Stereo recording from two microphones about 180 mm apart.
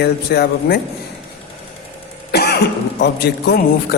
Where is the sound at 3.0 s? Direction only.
60° left (ahead or behind).